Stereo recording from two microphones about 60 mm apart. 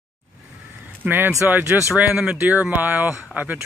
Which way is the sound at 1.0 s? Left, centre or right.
Right.